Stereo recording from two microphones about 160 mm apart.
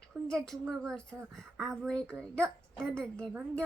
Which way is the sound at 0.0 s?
5° left (ahead or behind).